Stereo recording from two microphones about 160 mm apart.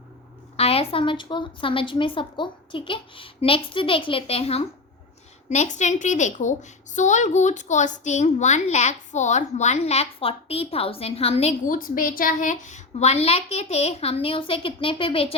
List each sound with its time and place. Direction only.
0.5 s a woman's voice: 40° left (ahead or behind)
11.6 s a woman's voice: 60° left (ahead or behind); by 15.4 s 35° left (ahead or behind)